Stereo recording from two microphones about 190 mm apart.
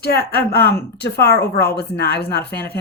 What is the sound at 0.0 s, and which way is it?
Speech, 55° left (ahead or behind).